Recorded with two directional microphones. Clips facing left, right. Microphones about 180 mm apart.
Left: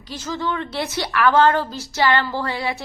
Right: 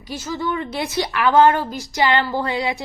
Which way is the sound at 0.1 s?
10° right (ahead or behind).